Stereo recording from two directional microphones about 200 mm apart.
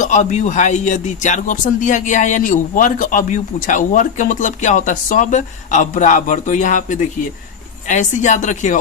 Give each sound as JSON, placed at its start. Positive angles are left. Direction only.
{"t": 0.0, "sound": "a man's voice", "side_deg": 35}